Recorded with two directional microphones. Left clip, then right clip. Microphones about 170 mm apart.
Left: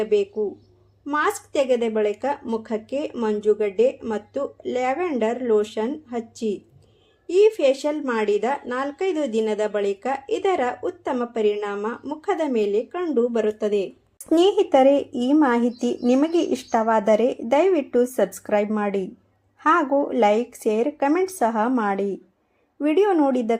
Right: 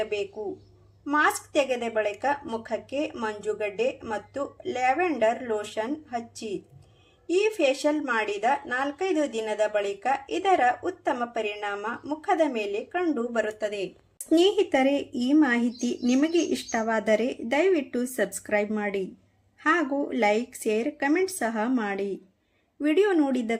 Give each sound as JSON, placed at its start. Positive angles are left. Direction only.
{"t": 0.0, "sound": "speech", "side_deg": 30}
{"t": 14.3, "sound": "speech", "side_deg": 10}